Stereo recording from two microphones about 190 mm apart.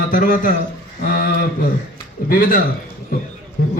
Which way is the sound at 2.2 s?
50° left (ahead or behind).